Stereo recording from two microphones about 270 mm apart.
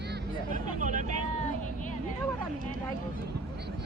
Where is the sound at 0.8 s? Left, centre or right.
Right.